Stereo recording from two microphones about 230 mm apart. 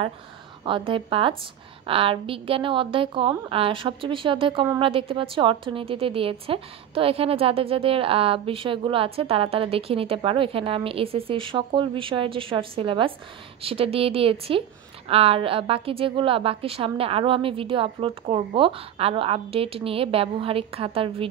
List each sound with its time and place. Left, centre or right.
0.7 s a woman's voice: right